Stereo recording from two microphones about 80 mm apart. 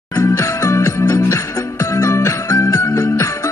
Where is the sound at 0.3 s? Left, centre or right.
Left.